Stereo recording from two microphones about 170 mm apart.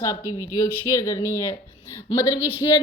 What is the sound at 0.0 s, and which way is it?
A woman's voice, 20° left (ahead or behind).